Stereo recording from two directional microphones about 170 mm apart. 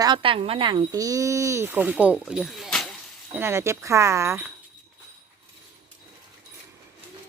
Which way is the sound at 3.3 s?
15° right (ahead or behind).